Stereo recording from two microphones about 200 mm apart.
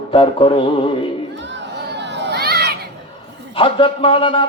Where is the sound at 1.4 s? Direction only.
65° right (ahead or behind).